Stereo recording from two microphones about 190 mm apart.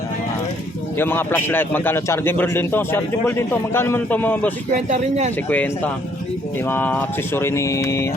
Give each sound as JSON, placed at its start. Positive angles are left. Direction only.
{"t": 0.9, "sound": "a man's voice", "side_deg": 10}
{"t": 4.9, "sound": "speech", "side_deg": -35}
{"t": 5.5, "sound": "a man's voice", "side_deg": 10}